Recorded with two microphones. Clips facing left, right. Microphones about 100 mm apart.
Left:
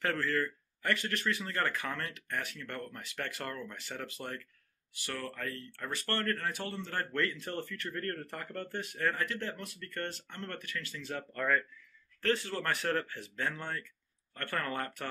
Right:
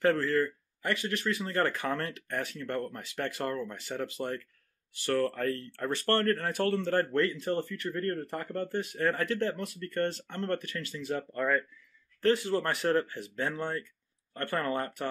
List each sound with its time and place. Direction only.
0.0 s speech: 25° right (ahead or behind)
4.9 s speech: 40° right (ahead or behind)
6.5 s speech: 65° right (ahead or behind)
6.8 s speech: 40° right (ahead or behind)
7.2 s speech: 25° right (ahead or behind)